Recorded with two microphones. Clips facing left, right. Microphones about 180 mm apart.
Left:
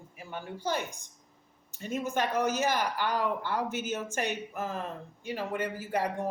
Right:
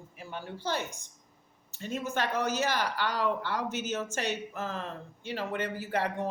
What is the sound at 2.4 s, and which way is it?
Speech, 55° left (ahead or behind).